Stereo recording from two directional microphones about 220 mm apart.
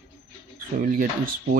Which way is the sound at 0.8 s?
40° right (ahead or behind).